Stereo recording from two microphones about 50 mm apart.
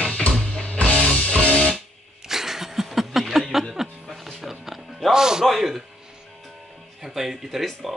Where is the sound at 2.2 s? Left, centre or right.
Centre.